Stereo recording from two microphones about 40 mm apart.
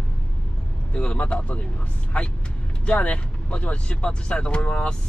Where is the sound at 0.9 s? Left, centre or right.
Left.